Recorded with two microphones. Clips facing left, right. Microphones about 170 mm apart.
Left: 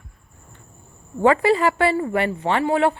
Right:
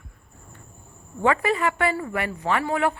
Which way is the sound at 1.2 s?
30° left (ahead or behind).